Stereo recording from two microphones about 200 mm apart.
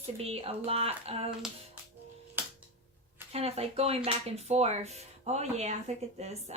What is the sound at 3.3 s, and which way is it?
Speech, 30° right (ahead or behind).